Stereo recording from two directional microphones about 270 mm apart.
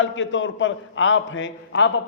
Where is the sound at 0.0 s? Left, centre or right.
Left.